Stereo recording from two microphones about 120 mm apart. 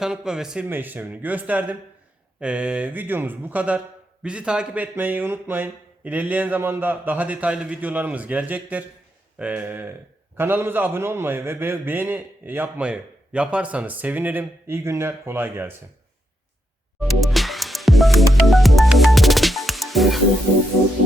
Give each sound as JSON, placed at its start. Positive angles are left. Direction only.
{"t": 0.0, "sound": "speech", "side_deg": -5}
{"t": 0.6, "sound": "a man's voice", "side_deg": -15}
{"t": 17.2, "sound": "music", "side_deg": 0}